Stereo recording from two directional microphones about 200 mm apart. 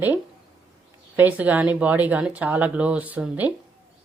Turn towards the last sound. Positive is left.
turn(degrees=-10)  # may be behind; listen again after turning